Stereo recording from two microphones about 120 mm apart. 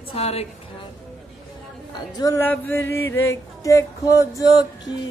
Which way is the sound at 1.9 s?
35° left (ahead or behind).